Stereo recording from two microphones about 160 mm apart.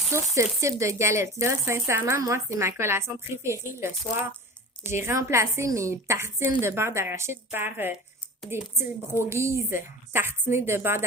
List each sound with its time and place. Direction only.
0.1 s a woman's voice: 20° right (ahead or behind)